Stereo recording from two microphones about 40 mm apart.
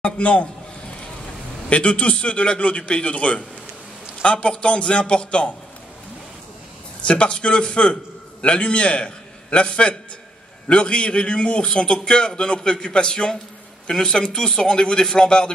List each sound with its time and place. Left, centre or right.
0.0 s a man's voice: left
1.7 s a man's voice: left
7.1 s a man's voice: left